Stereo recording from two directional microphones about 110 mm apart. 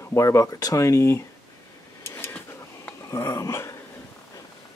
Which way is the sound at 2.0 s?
20° left (ahead or behind).